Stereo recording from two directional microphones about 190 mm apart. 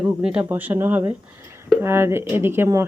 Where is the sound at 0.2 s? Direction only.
5° right (ahead or behind).